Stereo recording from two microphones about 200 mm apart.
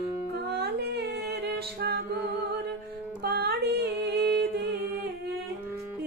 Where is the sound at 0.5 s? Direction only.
55° right (ahead or behind).